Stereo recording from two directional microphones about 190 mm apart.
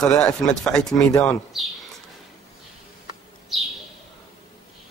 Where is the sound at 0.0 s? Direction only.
5° left (ahead or behind).